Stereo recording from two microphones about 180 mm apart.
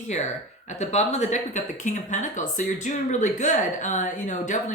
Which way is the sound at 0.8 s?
40° left (ahead or behind).